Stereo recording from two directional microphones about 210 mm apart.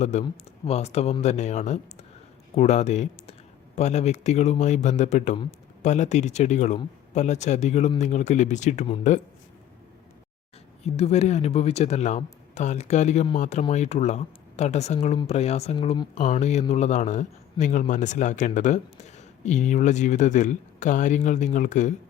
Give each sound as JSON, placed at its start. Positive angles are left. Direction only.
{"t": 0.0, "sound": "speech", "side_deg": 35}
{"t": 10.8, "sound": "speech", "side_deg": 30}